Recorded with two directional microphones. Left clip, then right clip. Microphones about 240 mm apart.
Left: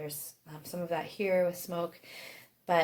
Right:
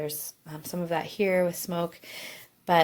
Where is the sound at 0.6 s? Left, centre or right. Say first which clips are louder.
Right 4 dB; right.